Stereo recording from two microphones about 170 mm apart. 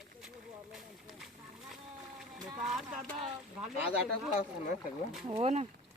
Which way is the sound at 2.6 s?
5° right (ahead or behind).